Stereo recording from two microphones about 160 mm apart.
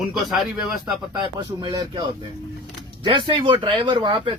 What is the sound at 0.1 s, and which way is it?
Speech, 5° right (ahead or behind).